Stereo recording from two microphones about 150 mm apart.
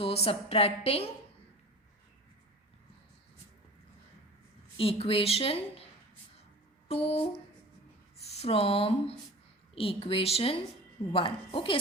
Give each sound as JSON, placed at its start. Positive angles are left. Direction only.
{"t": 0.0, "sound": "a woman's voice", "side_deg": 40}
{"t": 4.8, "sound": "a woman's voice", "side_deg": 40}